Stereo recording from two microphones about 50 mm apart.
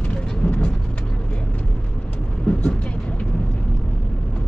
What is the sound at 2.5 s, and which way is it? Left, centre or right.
Vehicle, left.